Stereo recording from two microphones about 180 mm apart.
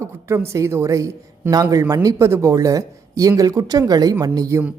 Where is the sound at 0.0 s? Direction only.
15° right (ahead or behind).